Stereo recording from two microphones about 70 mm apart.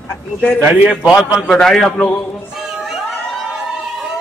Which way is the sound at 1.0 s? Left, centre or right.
Centre.